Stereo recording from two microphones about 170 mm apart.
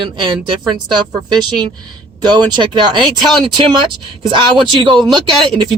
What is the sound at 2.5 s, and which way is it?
Speech, 25° right (ahead or behind).